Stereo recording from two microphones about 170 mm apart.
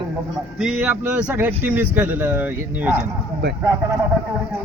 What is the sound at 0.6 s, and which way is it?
A man's voice, 5° right (ahead or behind).